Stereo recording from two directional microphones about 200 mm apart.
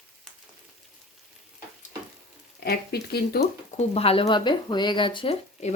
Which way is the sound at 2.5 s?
55° left (ahead or behind).